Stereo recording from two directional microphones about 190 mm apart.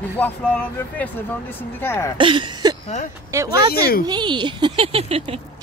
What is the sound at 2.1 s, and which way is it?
Speech, 25° right (ahead or behind).